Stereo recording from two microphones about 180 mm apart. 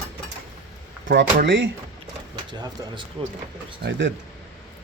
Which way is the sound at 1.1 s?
70° right (ahead or behind).